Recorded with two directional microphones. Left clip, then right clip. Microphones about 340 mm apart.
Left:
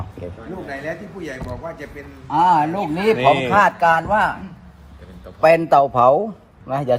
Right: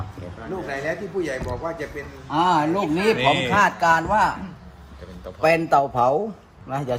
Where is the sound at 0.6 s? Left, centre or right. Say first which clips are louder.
Right 1 dB; right.